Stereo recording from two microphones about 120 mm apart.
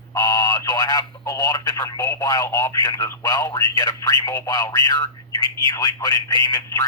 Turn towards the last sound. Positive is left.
turn(degrees=30)  # may be behind; listen again after turning